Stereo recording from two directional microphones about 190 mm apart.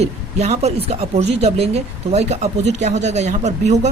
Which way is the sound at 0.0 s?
35° right (ahead or behind).